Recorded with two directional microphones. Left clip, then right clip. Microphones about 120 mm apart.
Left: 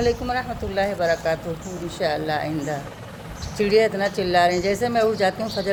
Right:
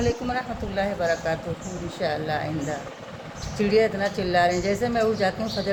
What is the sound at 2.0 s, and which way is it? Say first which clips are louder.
A woman's voice: left 3 dB; 65° left (ahead or behind).